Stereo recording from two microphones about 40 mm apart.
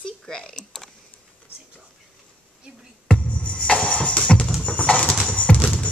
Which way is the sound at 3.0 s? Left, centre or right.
Left.